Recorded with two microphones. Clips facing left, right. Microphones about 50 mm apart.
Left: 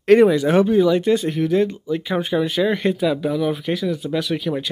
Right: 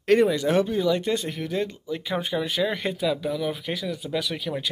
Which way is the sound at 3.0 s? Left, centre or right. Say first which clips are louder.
Left 3 dB; left.